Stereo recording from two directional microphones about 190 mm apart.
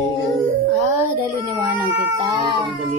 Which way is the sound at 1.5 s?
25° right (ahead or behind).